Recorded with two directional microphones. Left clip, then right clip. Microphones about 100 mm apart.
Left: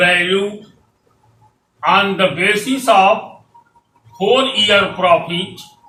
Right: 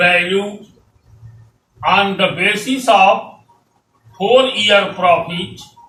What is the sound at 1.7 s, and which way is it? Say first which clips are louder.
A man's voice: even; 20° left (ahead or behind).